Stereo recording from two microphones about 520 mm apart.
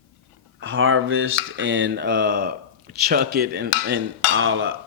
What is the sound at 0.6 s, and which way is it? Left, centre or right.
Speech, right.